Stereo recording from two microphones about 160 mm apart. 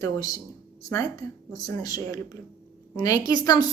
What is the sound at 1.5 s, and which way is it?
A woman's voice, 20° left (ahead or behind).